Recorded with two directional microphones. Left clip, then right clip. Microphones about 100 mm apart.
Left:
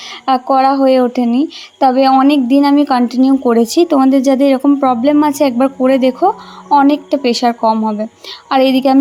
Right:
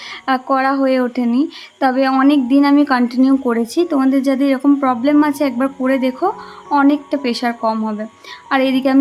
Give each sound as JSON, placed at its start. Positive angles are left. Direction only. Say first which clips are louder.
{"t": 0.3, "sound": "a woman's voice", "louder": "left 5 dB", "side_deg": 25}
{"t": 3.5, "sound": "a woman's voice", "louder": "left 6 dB", "side_deg": 35}